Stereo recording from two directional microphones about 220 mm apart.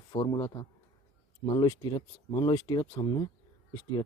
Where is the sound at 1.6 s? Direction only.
20° left (ahead or behind).